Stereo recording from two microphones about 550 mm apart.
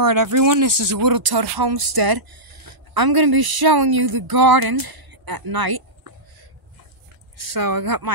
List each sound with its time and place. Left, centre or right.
0.0 s speech: right
7.3 s speech: right